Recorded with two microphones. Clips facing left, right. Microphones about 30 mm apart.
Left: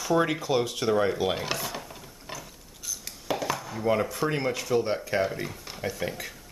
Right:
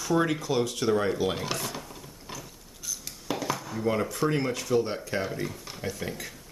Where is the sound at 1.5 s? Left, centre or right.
Centre.